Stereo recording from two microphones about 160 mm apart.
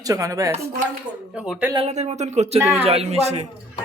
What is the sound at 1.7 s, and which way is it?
Speech, 40° right (ahead or behind).